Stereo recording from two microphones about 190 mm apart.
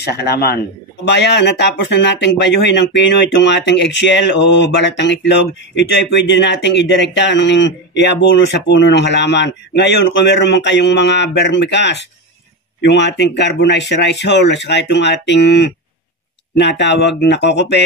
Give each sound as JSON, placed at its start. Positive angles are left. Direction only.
{"t": 0.0, "sound": "speech", "side_deg": 55}